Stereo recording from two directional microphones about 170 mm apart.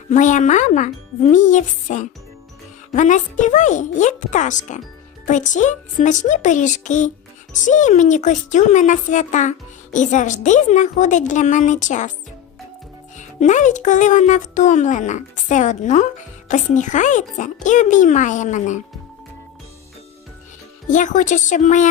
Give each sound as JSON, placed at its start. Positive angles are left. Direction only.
{"t": 0.1, "sound": "speech", "side_deg": 45}
{"t": 13.1, "sound": "speech", "side_deg": 45}
{"t": 20.9, "sound": "speech", "side_deg": 45}